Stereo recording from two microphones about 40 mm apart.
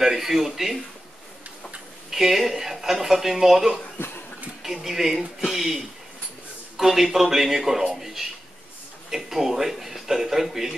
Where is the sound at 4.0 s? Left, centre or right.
Left.